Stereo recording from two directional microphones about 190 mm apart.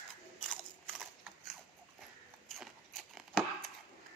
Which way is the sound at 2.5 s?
Centre (ahead or behind).